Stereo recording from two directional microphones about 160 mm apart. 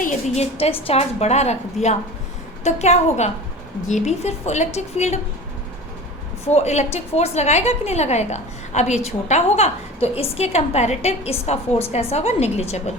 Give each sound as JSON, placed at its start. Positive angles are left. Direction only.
{"t": 0.3, "sound": "a woman's voice", "side_deg": 40}
{"t": 6.5, "sound": "a woman's voice", "side_deg": 45}